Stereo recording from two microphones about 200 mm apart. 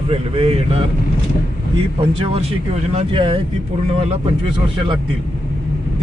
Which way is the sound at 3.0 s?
25° right (ahead or behind).